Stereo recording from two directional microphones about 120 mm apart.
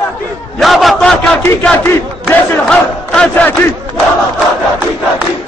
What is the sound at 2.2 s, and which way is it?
Crowd, 5° left (ahead or behind).